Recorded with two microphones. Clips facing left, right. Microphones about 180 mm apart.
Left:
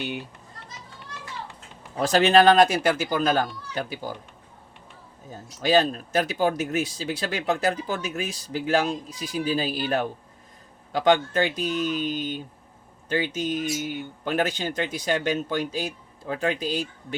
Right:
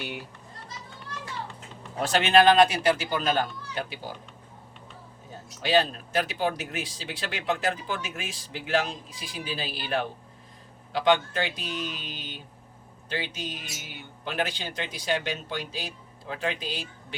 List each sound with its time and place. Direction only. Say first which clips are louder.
0.0 s a child's voice: left 5 dB; 20° left (ahead or behind)
2.0 s speech: left 3 dB; 40° left (ahead or behind)
5.6 s speech: left 3 dB; 40° left (ahead or behind)